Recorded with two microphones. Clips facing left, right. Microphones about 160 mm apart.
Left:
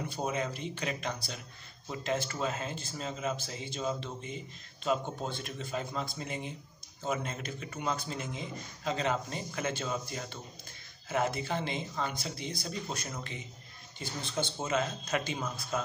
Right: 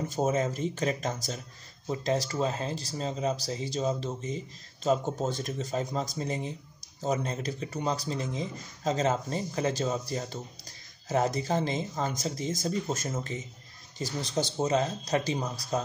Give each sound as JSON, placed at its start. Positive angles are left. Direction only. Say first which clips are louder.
{"t": 0.0, "sound": "speech", "louder": "right 6 dB", "side_deg": -45}